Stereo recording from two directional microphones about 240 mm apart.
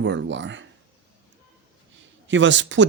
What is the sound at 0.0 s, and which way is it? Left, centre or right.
Speech, right.